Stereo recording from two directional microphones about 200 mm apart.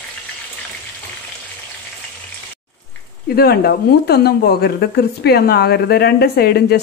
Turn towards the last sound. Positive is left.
turn(degrees=55)  # may be behind; listen again after turning